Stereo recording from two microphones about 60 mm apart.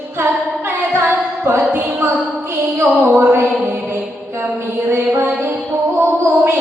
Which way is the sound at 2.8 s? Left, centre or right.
Right.